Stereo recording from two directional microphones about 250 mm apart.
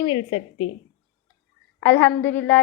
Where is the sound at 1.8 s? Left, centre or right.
Centre.